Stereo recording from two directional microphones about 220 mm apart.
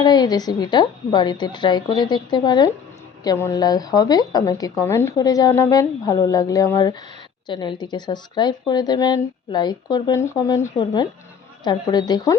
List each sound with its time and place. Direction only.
0.0 s a woman's voice: 20° left (ahead or behind)